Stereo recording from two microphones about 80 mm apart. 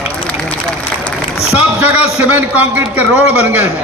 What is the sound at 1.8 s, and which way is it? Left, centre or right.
A man's voice, centre.